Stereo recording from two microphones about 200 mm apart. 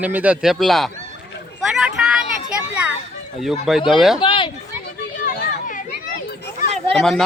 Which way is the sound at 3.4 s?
Centre (ahead or behind).